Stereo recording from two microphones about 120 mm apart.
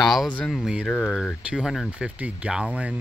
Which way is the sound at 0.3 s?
10° left (ahead or behind).